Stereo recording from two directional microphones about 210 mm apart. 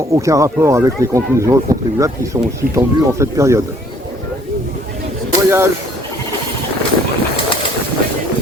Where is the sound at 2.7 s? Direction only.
15° right (ahead or behind).